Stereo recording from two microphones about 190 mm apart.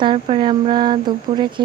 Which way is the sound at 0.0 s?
25° right (ahead or behind).